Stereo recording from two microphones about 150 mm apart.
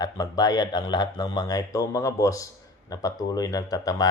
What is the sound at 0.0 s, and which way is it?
Speech, 25° left (ahead or behind).